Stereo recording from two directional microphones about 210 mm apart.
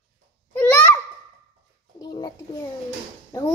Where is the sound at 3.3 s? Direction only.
15° left (ahead or behind).